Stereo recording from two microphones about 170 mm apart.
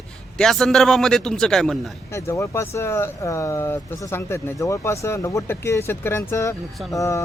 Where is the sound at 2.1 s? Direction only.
15° left (ahead or behind).